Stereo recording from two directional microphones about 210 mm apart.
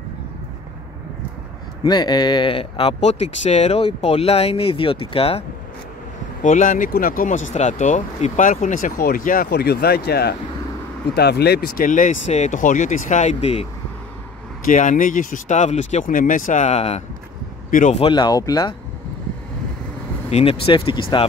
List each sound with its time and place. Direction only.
1.8 s speech: 20° left (ahead or behind)
6.4 s speech: 40° left (ahead or behind); by 18.8 s 20° left (ahead or behind)
20.2 s speech: 30° left (ahead or behind)